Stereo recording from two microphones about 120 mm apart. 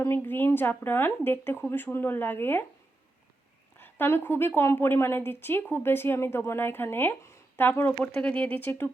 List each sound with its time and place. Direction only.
0.0 s a woman's voice: 20° left (ahead or behind)
3.8 s a woman's voice: 15° left (ahead or behind)